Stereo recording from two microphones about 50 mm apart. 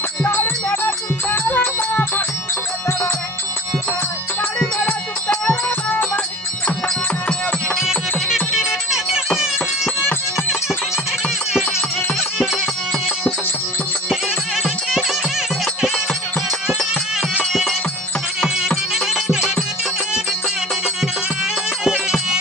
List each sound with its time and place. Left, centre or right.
0.3 s music: left
4.9 s music: centre
7.8 s music: centre
14.6 s music: centre
18.9 s music: centre